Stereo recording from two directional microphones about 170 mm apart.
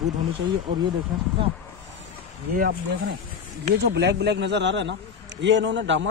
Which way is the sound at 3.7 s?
80° right.